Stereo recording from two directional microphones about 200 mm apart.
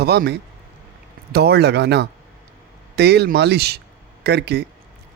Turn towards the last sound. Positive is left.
turn(degrees=-55)  # may be behind; listen again after turning